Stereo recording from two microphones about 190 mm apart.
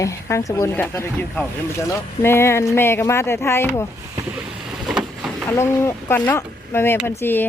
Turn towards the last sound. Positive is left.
turn(degrees=10)  # may be behind; listen again after turning